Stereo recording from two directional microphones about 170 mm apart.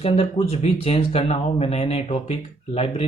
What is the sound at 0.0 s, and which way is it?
Speech, 35° left (ahead or behind).